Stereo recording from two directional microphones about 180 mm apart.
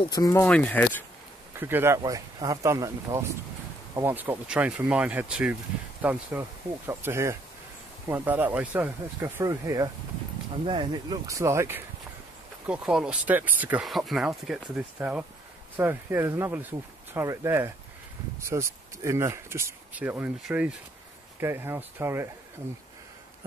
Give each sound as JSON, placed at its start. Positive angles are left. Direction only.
{"t": 0.1, "sound": "speech", "side_deg": 15}
{"t": 1.5, "sound": "speech", "side_deg": -10}